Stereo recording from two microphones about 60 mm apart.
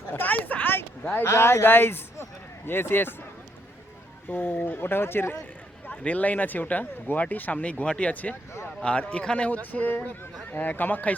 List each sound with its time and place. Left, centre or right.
0.1 s a sound: left
1.2 s a man's voice: left
4.3 s speech: left
6.0 s a man's voice: left